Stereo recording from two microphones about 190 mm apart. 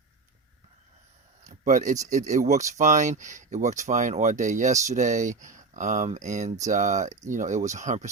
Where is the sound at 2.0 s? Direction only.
40° right (ahead or behind).